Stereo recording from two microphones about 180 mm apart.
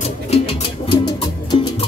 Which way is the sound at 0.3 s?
30° left (ahead or behind).